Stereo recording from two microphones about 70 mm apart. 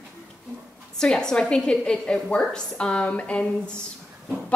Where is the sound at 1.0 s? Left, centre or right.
Centre.